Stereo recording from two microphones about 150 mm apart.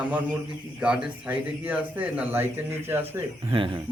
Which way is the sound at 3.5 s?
35° right (ahead or behind).